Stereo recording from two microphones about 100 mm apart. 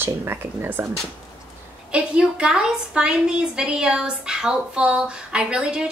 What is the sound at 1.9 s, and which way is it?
A woman's voice, 10° right (ahead or behind).